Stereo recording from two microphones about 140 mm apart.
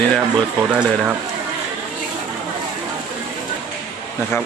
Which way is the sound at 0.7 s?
10° right (ahead or behind).